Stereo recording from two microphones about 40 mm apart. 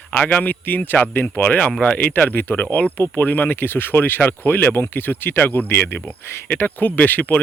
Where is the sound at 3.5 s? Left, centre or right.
Left.